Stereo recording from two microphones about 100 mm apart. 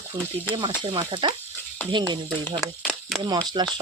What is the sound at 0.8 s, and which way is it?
Speech, 50° right (ahead or behind).